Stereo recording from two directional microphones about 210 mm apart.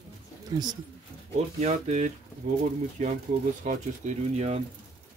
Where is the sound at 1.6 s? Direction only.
35° right (ahead or behind).